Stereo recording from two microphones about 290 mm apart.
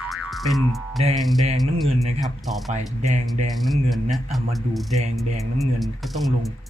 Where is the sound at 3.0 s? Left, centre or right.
Right.